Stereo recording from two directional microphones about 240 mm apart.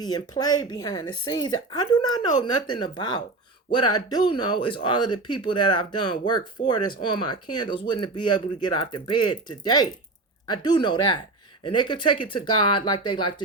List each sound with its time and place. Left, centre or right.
0.0 s speech: centre